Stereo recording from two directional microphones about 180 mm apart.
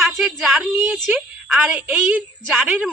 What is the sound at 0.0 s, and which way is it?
A woman's voice, centre (ahead or behind).